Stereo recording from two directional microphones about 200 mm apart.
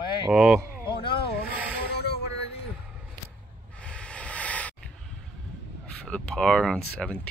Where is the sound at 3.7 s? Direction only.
5° left (ahead or behind).